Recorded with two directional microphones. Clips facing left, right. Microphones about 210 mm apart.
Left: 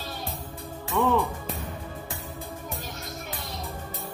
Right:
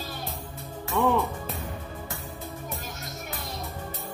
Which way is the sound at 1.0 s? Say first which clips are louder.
Even; 15° right (ahead or behind).